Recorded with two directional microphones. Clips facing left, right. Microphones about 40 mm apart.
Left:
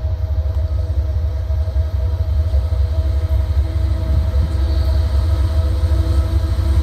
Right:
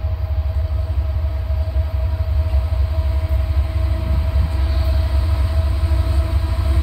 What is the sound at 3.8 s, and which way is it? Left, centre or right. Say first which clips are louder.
Vehicle: even; right.